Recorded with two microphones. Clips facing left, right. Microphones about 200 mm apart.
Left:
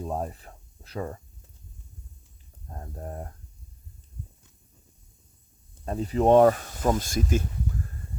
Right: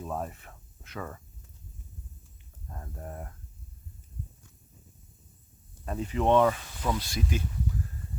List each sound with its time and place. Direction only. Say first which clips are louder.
0.0 s a sound: left 4 dB; 30° left (ahead or behind)
2.6 s speech: left 3 dB; 35° left (ahead or behind)
5.8 s speech: left 5 dB; 35° left (ahead or behind)